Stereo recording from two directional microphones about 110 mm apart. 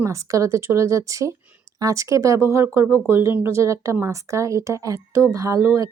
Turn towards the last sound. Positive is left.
turn(degrees=-30)  # may be behind; listen again after turning